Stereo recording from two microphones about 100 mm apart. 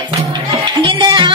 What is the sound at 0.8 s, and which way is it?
Music, 50° right (ahead or behind).